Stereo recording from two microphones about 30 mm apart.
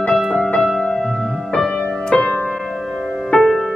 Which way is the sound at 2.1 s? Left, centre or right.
Left.